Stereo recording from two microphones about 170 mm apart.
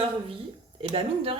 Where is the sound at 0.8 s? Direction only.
35° right (ahead or behind).